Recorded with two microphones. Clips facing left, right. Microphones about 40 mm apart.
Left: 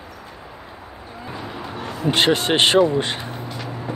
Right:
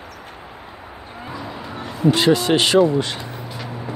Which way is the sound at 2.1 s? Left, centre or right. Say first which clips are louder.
Even; left.